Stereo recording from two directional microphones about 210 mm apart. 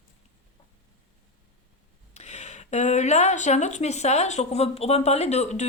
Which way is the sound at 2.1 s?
30° left (ahead or behind).